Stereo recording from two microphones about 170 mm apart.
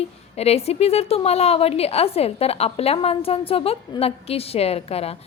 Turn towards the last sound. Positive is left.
turn(degrees=35)  # may be behind; listen again after turning